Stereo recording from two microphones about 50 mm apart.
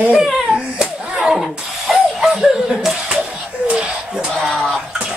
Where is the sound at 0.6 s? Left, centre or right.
Centre.